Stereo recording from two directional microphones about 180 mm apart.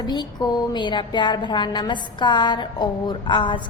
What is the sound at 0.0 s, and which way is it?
A woman's voice, 25° left (ahead or behind).